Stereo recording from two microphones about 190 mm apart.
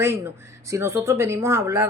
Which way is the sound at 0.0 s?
10° right (ahead or behind).